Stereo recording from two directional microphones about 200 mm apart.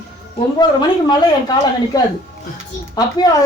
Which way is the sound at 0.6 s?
20° left (ahead or behind).